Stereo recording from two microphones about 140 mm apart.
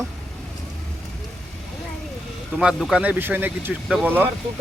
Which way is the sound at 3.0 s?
15° right (ahead or behind).